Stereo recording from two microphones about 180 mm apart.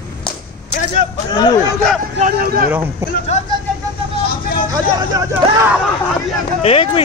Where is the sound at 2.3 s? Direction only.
55° right (ahead or behind).